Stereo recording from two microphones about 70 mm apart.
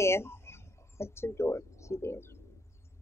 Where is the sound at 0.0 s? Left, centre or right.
Left.